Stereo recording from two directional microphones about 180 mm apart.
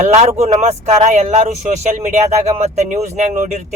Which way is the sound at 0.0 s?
35° right (ahead or behind).